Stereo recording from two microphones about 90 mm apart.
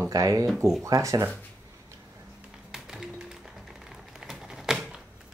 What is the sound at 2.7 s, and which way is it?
Music, 5° right (ahead or behind).